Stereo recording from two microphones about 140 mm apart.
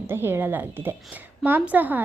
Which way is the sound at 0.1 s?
15° right (ahead or behind).